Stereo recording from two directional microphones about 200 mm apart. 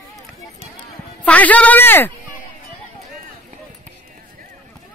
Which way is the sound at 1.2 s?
5° left (ahead or behind).